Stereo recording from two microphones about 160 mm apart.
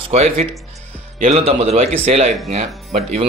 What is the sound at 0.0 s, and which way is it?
A man's voice, 40° right (ahead or behind).